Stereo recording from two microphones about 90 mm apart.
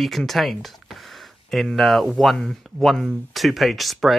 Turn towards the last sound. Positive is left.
turn(degrees=0)  # may be behind; listen again after turning